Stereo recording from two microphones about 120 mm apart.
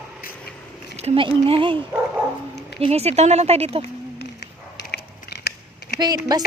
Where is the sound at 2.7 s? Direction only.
55° right (ahead or behind).